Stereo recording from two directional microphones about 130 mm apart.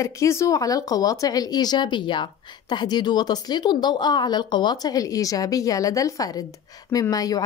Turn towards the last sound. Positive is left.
turn(degrees=30)  # may be behind; listen again after turning